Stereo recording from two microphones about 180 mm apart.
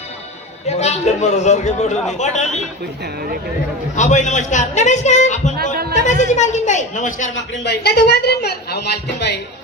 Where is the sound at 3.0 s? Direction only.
60° right (ahead or behind).